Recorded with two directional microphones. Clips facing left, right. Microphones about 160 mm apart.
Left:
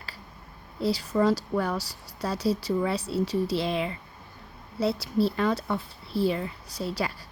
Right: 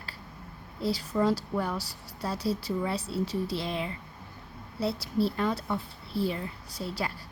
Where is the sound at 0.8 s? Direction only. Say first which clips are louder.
Left 3 dB; 85° left.